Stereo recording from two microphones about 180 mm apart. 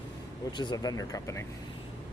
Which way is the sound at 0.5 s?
25° left (ahead or behind).